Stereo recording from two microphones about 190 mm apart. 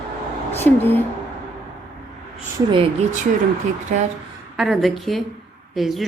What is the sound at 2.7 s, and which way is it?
Speech, 35° right (ahead or behind).